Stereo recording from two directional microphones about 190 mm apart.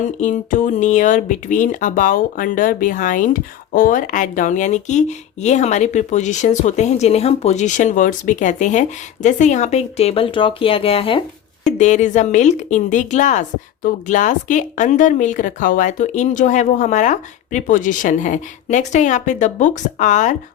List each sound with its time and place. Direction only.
0.0 s speech: 40° left (ahead or behind)
11.8 s speech: 40° left (ahead or behind)